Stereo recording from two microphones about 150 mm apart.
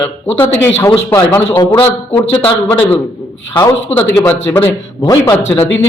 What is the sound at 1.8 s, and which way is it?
A man's voice, 10° left (ahead or behind).